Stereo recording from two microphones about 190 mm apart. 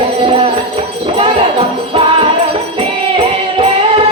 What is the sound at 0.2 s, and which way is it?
Music, 30° right (ahead or behind).